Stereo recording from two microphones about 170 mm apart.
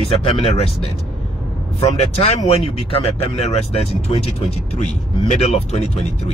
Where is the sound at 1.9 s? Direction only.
40° left (ahead or behind).